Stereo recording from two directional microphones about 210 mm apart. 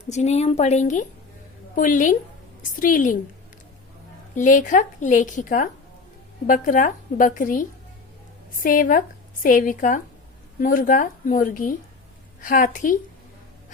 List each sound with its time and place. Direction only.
0.0 s a woman's voice: 35° left (ahead or behind)
4.4 s a woman's voice: 35° left (ahead or behind)